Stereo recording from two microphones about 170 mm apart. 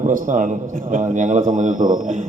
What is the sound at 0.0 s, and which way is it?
A man's voice, 50° right (ahead or behind).